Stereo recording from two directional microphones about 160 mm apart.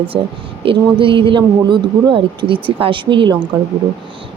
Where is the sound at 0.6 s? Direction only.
35° right (ahead or behind).